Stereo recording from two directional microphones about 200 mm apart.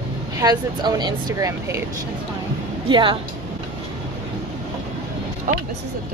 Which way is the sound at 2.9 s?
25° right (ahead or behind).